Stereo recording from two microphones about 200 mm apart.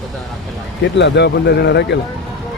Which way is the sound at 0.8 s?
60° left (ahead or behind).